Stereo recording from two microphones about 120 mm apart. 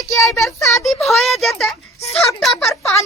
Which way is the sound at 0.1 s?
25° left (ahead or behind).